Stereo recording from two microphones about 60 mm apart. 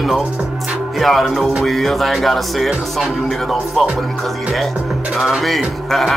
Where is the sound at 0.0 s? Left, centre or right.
Centre.